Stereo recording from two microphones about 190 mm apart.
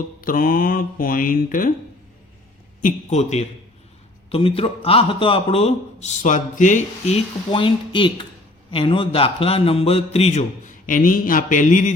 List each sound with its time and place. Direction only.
0.2 s speech: 50° left (ahead or behind)
2.8 s a man's voice: 35° left (ahead or behind)
7.5 s a man's voice: 25° left (ahead or behind); by 11.9 s 40° left (ahead or behind)